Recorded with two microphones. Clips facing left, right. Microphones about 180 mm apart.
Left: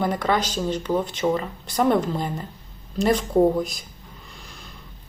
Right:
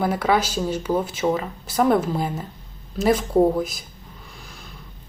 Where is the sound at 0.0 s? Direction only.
5° right (ahead or behind).